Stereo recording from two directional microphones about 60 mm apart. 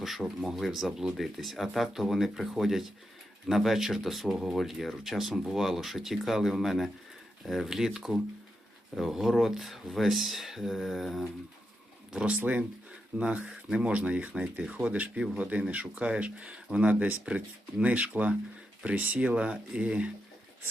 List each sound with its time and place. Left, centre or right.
0.0 s speech: centre
12.1 s speech: centre